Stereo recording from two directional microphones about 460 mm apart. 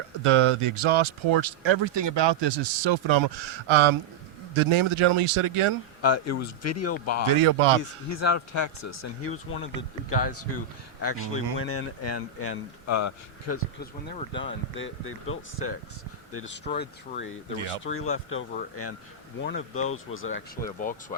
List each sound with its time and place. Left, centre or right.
0.2 s speech: right
6.0 s speech: left
14.2 s speech: centre
14.8 s speech: left